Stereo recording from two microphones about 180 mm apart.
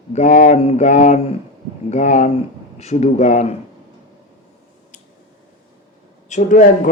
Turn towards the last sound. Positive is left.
turn(degrees=45)  # may be behind; listen again after turning